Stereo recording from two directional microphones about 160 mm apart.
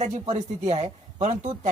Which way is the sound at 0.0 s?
45° right (ahead or behind).